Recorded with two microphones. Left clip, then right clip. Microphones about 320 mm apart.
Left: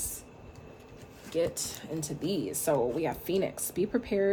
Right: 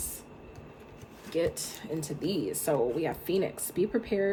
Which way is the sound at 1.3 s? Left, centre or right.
Centre.